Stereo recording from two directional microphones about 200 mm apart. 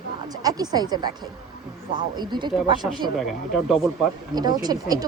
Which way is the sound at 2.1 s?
25° right (ahead or behind).